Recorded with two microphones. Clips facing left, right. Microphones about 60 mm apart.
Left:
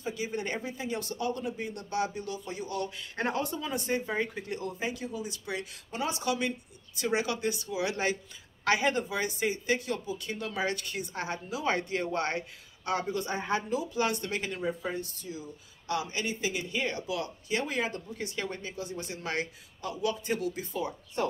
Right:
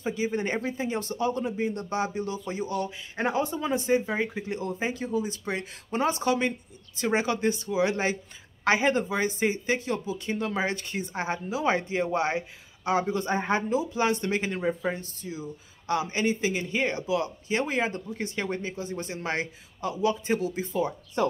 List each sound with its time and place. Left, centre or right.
0.0 s speech: right